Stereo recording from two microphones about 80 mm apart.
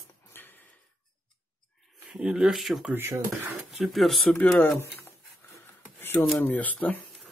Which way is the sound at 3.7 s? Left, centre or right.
Centre.